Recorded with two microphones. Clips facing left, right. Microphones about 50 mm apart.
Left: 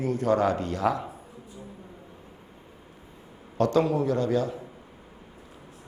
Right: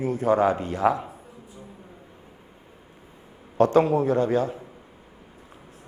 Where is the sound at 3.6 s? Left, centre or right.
Right.